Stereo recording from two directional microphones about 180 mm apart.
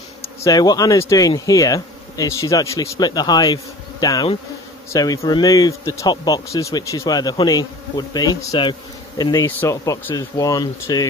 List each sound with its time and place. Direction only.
0.2 s speech: 20° left (ahead or behind)